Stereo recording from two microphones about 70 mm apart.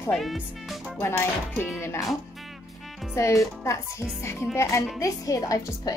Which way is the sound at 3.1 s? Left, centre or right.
Left.